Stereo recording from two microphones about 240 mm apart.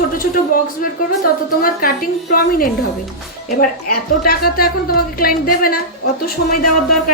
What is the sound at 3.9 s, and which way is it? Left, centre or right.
A woman's voice, left.